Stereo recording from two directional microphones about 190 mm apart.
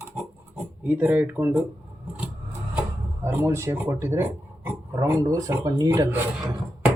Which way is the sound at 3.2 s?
10° right (ahead or behind).